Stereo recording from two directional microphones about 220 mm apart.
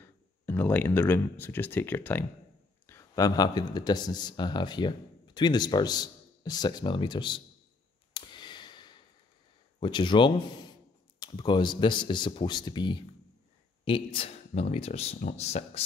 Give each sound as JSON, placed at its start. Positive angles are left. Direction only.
{"t": 0.0, "sound": "speech", "side_deg": 10}
{"t": 8.1, "sound": "sigh", "side_deg": 20}
{"t": 9.8, "sound": "speech", "side_deg": 20}